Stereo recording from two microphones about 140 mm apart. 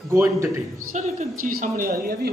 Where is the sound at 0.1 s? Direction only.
20° right (ahead or behind).